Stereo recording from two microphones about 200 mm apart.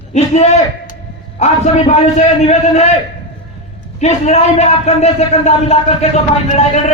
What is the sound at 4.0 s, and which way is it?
A man's voice, 35° left (ahead or behind).